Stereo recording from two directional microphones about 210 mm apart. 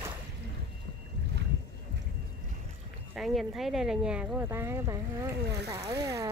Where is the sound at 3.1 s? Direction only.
Centre (ahead or behind).